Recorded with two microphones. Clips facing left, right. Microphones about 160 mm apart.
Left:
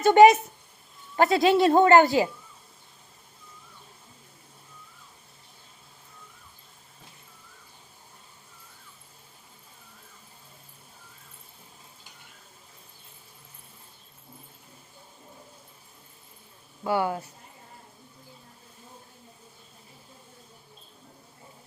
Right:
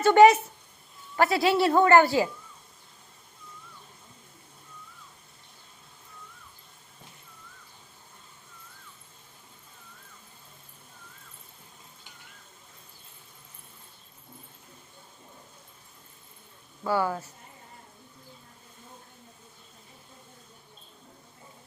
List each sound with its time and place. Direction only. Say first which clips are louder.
0.0 s a woman's voice: left 1 dB; 15° left (ahead or behind)
16.8 s speech: left 1 dB; 20° left (ahead or behind)